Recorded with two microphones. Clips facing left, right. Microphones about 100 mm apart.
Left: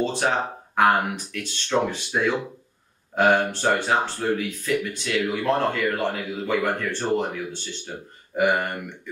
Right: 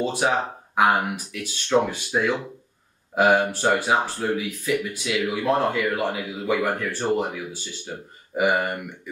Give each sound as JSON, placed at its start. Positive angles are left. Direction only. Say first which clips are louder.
{"t": 0.0, "sound": "speech", "louder": "right 1 dB", "side_deg": -10}